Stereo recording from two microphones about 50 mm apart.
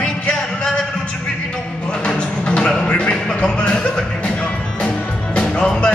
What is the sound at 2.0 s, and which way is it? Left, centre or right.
Music, centre.